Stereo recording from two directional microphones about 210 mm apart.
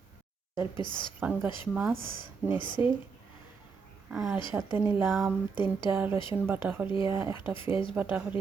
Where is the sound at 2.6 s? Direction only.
20° left (ahead or behind).